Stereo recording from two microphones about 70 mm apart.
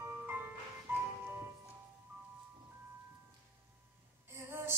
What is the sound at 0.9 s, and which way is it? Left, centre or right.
Music, right.